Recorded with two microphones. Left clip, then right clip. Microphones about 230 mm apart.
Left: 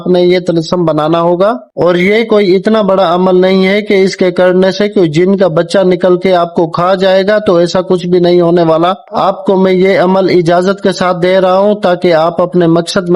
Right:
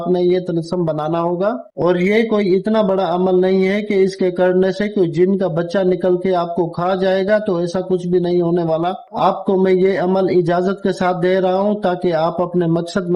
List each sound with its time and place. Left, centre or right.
0.1 s speech: left